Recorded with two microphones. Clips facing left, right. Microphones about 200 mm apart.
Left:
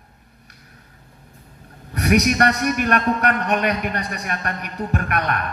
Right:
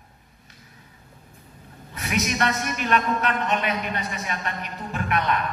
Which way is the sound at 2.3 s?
50° left (ahead or behind).